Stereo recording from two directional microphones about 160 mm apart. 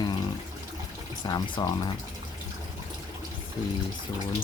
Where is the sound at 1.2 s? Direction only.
25° left (ahead or behind).